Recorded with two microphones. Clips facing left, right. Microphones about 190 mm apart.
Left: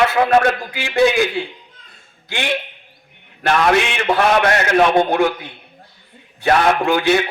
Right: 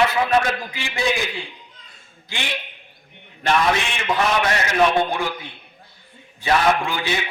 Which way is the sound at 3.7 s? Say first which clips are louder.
Left 6 dB; 60° left (ahead or behind).